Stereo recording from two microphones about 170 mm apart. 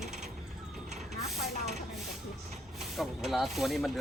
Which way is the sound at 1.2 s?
Centre (ahead or behind).